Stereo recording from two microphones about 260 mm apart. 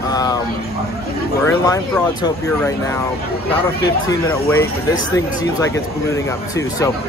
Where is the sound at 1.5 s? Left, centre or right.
Centre.